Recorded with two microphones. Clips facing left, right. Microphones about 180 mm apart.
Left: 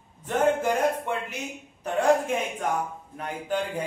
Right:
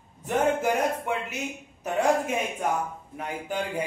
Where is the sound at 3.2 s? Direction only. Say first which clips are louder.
Left 2 dB; 10° right (ahead or behind).